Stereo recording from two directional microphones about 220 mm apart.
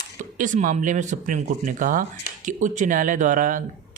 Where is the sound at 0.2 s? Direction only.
35° right (ahead or behind).